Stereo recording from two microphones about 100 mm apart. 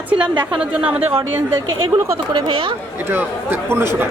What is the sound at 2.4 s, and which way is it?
Speech, 65° right (ahead or behind).